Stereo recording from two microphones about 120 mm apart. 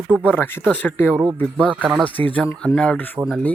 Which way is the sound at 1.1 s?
15° right (ahead or behind).